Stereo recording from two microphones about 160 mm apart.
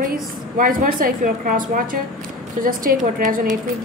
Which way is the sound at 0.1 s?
60° right (ahead or behind).